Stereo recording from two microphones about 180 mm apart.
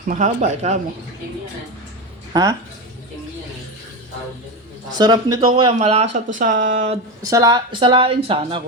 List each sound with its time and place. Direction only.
0.1 s speech: 40° right (ahead or behind)
2.3 s speech: 20° right (ahead or behind)
4.9 s speech: 25° right (ahead or behind); by 7.0 s 40° right (ahead or behind)
7.3 s speech: 20° right (ahead or behind)